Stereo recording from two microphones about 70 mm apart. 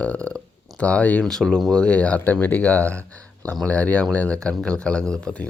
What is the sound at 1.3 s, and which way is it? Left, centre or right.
Speech, centre.